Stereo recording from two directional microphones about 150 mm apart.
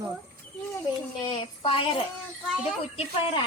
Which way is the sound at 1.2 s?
35° left (ahead or behind).